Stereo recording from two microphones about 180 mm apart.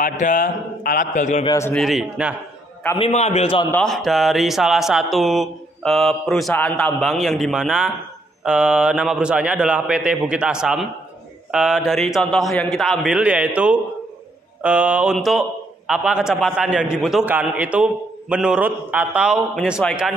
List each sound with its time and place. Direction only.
0.0 s a man's voice: 50° left (ahead or behind)
1.4 s a man's voice: 20° left (ahead or behind)
1.7 s speech: centre (ahead or behind)
3.0 s a man's voice: 35° left (ahead or behind)
3.7 s speech: centre (ahead or behind)
14.6 s mantra: 5° right (ahead or behind)
15.9 s speech: 5° right (ahead or behind)
17.3 s mantra: 5° right (ahead or behind)
18.3 s speech: 5° right (ahead or behind)